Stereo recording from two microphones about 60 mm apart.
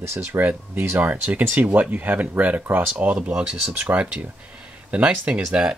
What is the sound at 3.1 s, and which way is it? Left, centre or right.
Speech, centre.